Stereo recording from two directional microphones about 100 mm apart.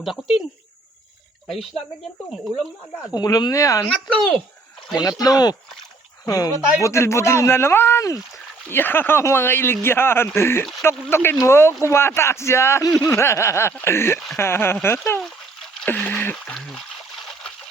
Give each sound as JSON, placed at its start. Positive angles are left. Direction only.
{"t": 0.0, "sound": "speech", "side_deg": 0}
{"t": 1.5, "sound": "speech", "side_deg": 5}
{"t": 3.2, "sound": "speech", "side_deg": 40}
{"t": 4.9, "sound": "speech", "side_deg": 40}
{"t": 16.6, "sound": "trickle", "side_deg": 0}